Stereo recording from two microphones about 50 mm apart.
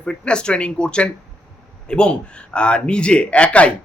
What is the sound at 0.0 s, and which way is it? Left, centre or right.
A man's voice, centre.